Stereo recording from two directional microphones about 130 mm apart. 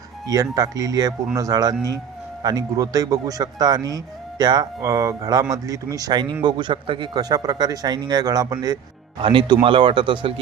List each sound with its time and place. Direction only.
0.3 s a man's voice: 25° right (ahead or behind)